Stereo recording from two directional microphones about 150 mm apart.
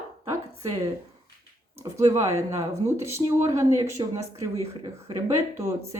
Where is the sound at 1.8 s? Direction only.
20° right (ahead or behind).